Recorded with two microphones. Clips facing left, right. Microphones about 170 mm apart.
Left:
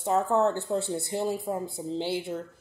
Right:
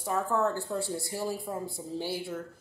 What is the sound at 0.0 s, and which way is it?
Speech, 25° left (ahead or behind).